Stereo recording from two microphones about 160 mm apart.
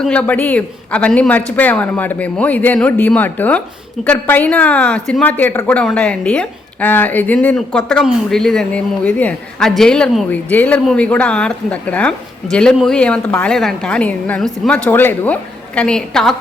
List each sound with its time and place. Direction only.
0.0 s a woman's voice: 5° left (ahead or behind)